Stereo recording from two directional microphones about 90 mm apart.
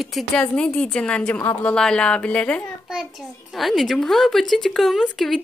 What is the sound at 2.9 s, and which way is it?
A child's voice, 5° right (ahead or behind).